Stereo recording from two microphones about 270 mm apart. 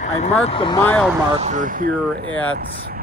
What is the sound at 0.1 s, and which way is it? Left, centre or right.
Speech, left.